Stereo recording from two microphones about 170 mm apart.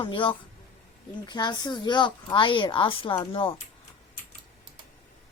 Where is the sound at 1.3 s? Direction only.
25° left (ahead or behind).